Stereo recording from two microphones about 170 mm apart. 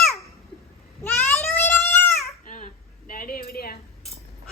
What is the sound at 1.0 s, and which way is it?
Goat, 10° left (ahead or behind).